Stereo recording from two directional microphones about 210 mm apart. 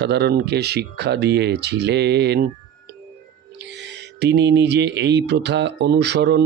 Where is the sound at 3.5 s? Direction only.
55° right (ahead or behind).